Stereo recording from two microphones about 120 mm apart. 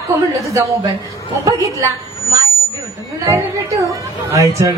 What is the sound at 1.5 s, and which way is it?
Speech, 25° right (ahead or behind).